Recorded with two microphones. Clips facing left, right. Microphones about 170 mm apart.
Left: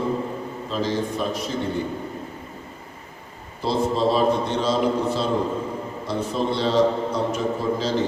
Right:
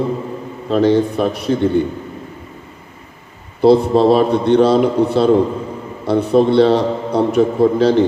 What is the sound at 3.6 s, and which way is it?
A man's voice, 65° right (ahead or behind).